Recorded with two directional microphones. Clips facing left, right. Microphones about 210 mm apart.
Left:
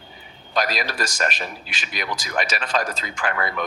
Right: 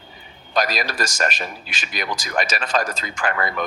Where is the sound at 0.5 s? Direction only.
45° right (ahead or behind).